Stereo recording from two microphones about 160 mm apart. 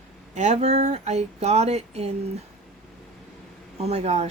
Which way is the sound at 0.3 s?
45° right (ahead or behind).